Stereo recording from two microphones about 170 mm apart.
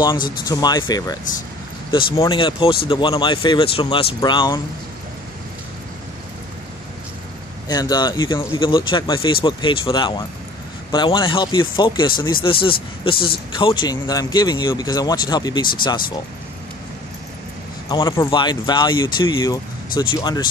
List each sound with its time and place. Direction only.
0.0 s speech: 25° left (ahead or behind)
7.6 s speech: 25° left (ahead or behind)
17.8 s speech: 25° left (ahead or behind)